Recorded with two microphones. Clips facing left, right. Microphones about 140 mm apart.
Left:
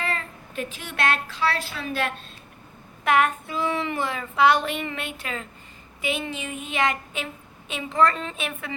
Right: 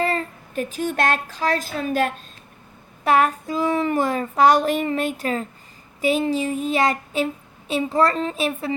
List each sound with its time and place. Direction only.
0.0 s speech: 40° right (ahead or behind)
3.0 s child singing: 35° right (ahead or behind)